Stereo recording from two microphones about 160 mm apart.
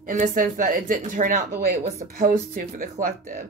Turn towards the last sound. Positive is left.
turn(degrees=-55)  # may be behind; listen again after turning